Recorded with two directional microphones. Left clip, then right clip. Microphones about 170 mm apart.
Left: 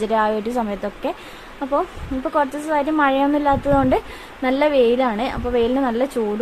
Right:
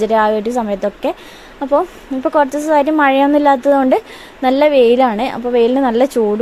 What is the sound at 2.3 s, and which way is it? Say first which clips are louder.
A woman's voice: right 7 dB; 35° right (ahead or behind).